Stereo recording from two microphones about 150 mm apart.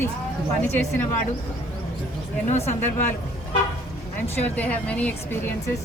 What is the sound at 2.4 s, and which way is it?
Speech, 45° left (ahead or behind).